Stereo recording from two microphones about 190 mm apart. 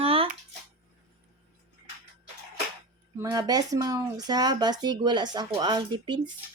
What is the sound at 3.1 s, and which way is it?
Speech, 20° right (ahead or behind).